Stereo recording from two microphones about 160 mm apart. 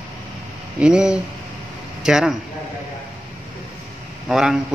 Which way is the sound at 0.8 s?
5° right (ahead or behind).